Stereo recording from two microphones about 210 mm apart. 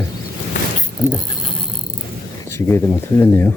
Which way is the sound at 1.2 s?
25° left (ahead or behind).